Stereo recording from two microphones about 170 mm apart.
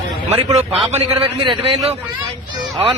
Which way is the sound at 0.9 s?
35° right (ahead or behind).